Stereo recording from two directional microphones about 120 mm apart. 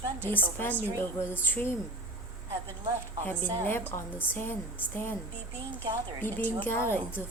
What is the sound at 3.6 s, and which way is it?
Speech, 15° left (ahead or behind).